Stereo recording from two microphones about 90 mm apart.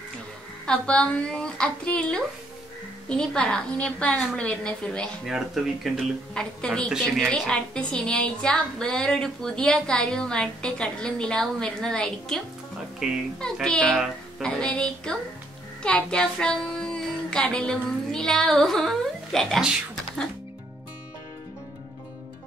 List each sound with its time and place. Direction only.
0.7 s a woman's voice: 10° left (ahead or behind)
5.2 s speech: 5° right (ahead or behind)
6.9 s speech: 5° right (ahead or behind)
7.2 s a woman's voice: 10° left (ahead or behind)
13.0 s speech: 5° right (ahead or behind)
13.4 s a woman's voice: 5° left (ahead or behind)
15.8 s music: 10° left (ahead or behind)